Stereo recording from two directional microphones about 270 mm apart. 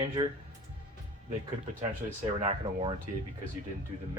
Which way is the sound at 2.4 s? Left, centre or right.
Centre.